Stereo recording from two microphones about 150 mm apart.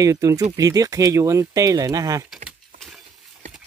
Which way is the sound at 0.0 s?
20° right (ahead or behind).